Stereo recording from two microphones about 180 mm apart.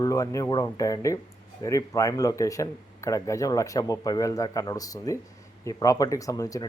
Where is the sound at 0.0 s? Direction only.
20° left (ahead or behind).